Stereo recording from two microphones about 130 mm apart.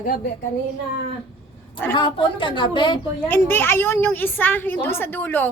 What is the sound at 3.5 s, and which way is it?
A woman's voice, 15° left (ahead or behind).